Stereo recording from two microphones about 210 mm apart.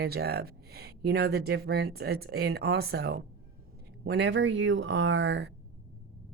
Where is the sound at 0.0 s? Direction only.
50° right (ahead or behind).